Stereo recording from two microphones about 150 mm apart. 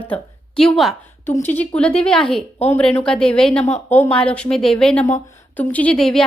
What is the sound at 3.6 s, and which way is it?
Speech, 50° left (ahead or behind).